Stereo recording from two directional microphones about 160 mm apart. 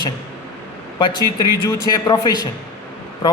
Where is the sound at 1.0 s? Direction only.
25° left (ahead or behind).